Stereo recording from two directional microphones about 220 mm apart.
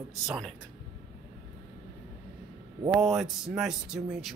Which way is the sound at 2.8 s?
20° right (ahead or behind).